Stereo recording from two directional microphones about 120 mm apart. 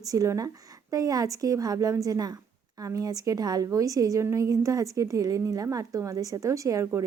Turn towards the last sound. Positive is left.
turn(degrees=-25)  # may be behind; listen again after turning